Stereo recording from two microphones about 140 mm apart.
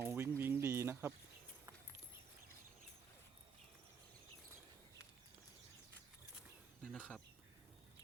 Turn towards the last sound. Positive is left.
turn(degrees=5)  # may be behind; listen again after turning